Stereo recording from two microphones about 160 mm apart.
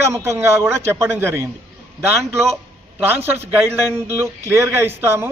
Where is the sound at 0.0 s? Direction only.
15° right (ahead or behind).